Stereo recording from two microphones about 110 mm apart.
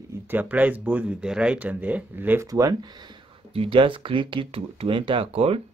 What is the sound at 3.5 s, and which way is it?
Speech, 55° right (ahead or behind).